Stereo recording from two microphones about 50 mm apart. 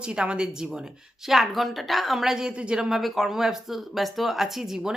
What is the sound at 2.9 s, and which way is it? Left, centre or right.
Speech, centre.